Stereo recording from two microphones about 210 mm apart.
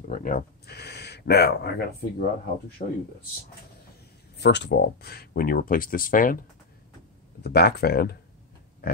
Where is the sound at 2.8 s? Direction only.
40° left (ahead or behind).